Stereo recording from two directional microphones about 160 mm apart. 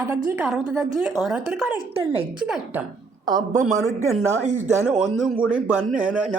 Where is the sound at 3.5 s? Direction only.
50° right (ahead or behind).